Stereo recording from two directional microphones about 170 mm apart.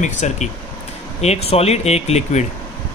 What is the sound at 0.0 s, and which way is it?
A man's voice, 45° left (ahead or behind).